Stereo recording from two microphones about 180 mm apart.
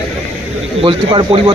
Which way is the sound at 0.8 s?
25° right (ahead or behind).